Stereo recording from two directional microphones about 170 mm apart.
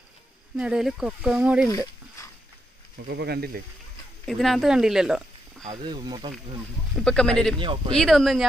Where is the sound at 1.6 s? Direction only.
20° left (ahead or behind).